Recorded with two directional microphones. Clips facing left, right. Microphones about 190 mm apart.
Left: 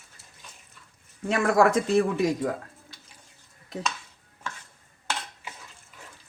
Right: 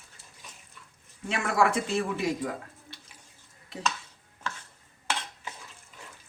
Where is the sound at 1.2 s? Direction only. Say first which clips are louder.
Left 5 dB; 40° left (ahead or behind).